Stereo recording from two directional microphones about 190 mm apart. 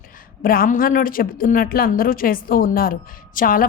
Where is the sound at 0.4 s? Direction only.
50° left (ahead or behind).